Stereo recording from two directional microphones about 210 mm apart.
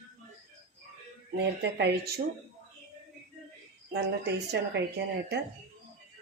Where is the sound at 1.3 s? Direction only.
55° right (ahead or behind).